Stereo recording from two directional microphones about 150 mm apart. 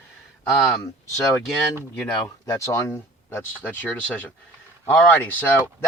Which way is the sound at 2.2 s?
20° left (ahead or behind).